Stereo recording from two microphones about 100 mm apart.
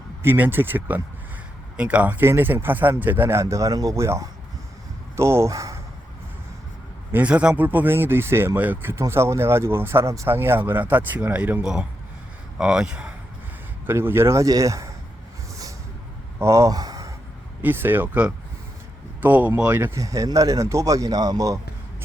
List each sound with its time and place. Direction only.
0.2 s speech: 20° right (ahead or behind)
7.1 s speech: 15° right (ahead or behind)
13.8 s speech: 20° right (ahead or behind)
16.4 s speech: 30° right (ahead or behind)
17.6 s speech: 20° right (ahead or behind)
20.0 s speech: 35° right (ahead or behind)